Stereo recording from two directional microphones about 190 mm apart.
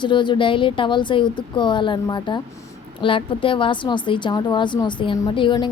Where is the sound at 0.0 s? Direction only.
25° left (ahead or behind).